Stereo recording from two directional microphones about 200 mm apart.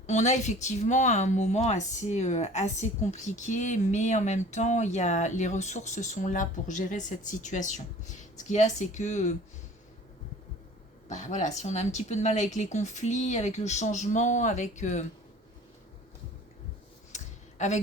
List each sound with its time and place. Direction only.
0.1 s speech: 35° left (ahead or behind)
11.1 s speech: 35° left (ahead or behind)
17.1 s a sound: 35° left (ahead or behind)